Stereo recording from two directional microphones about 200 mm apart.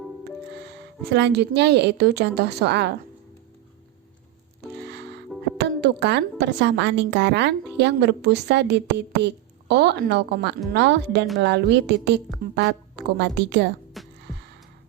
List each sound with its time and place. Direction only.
1.0 s a woman's voice: 60° right (ahead or behind)
4.7 s music: 60° right (ahead or behind)
5.5 s a woman's voice: 60° right (ahead or behind)
14.0 s music: centre (ahead or behind)